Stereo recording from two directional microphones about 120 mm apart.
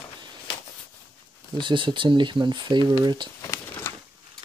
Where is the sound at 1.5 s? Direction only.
45° right (ahead or behind).